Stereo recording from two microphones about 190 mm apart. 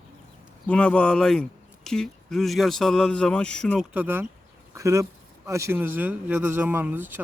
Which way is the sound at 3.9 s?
10° right (ahead or behind).